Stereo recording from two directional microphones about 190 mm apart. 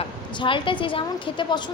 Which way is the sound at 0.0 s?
25° left (ahead or behind).